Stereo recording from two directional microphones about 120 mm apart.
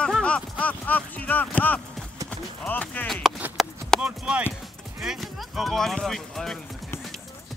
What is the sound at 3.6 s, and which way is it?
Clip-clop, centre (ahead or behind).